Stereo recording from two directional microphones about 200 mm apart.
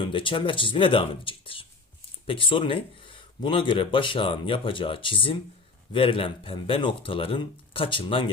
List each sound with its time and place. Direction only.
0.1 s speech: 25° left (ahead or behind)